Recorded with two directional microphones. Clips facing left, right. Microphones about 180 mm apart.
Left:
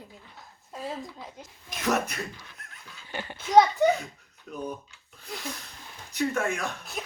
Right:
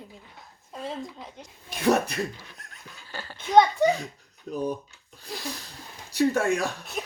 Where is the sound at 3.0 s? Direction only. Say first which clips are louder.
Left 3 dB; 20° left (ahead or behind).